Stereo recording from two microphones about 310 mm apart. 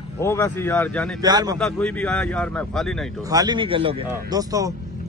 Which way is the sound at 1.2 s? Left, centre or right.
Centre.